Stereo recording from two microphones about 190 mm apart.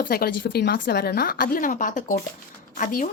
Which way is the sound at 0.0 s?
50° left (ahead or behind).